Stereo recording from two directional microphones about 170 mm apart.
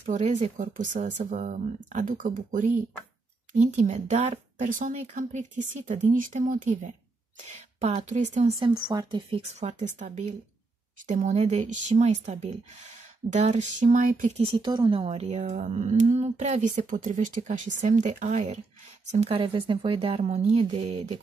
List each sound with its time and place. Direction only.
0.0 s speech: 45° right (ahead or behind)
8.5 s speech: 25° right (ahead or behind); by 14.3 s 50° right (ahead or behind)
14.4 s speech: 30° right (ahead or behind)
19.1 s speech: 35° right (ahead or behind)